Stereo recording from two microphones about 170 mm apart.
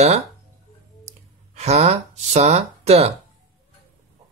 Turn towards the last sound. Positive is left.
turn(degrees=-40)  # may be behind; listen again after turning